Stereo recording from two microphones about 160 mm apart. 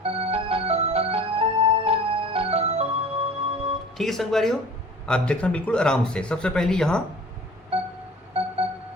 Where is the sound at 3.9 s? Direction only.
Centre (ahead or behind).